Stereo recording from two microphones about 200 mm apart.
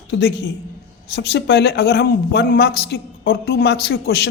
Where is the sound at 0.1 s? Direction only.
60° left (ahead or behind).